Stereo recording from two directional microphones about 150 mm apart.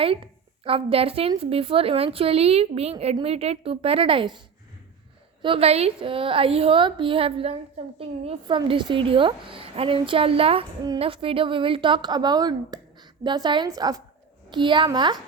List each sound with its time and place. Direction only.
0.6 s a woman's voice: 40° right (ahead or behind)
5.4 s a woman's voice: 40° right (ahead or behind)